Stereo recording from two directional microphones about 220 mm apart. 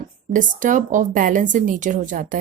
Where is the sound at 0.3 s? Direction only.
35° right (ahead or behind).